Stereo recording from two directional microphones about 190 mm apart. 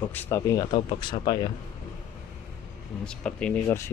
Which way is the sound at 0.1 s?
10° left (ahead or behind).